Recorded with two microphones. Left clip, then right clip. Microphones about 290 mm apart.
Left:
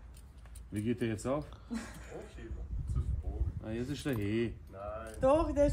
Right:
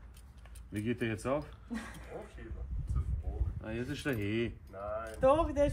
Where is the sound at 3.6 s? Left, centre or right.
Centre.